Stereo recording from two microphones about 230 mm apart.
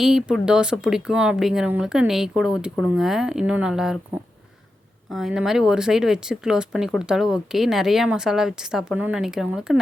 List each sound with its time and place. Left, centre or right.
0.0 s speech: centre
5.1 s speech: centre